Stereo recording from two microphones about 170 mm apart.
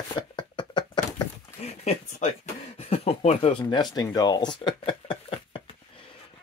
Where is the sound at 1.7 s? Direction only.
40° left (ahead or behind).